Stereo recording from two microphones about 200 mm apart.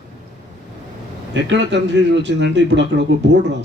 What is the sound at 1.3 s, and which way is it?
Speech, 65° right (ahead or behind).